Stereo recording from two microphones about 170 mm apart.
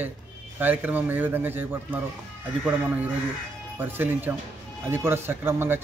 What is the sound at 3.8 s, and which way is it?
Speech, 10° right (ahead or behind).